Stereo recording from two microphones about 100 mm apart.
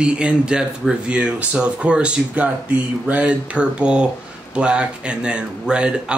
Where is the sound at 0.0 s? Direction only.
10° right (ahead or behind).